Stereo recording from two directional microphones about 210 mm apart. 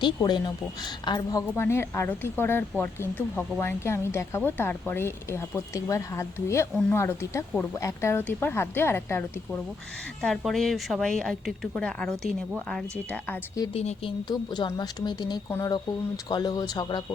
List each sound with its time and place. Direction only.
0.0 s a woman's voice: 20° left (ahead or behind)
13.7 s speech: 25° left (ahead or behind)